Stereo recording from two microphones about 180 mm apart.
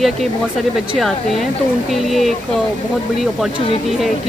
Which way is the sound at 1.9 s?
Centre (ahead or behind).